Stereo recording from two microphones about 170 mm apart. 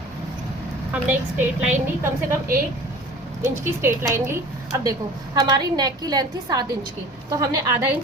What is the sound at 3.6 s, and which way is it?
Speech, 15° right (ahead or behind).